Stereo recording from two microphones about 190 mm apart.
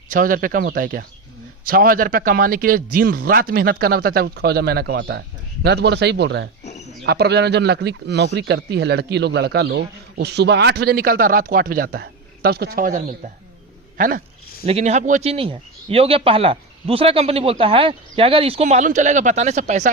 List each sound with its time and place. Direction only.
0.1 s a man's voice: 45° right (ahead or behind)
14.7 s a man's voice: 35° right (ahead or behind)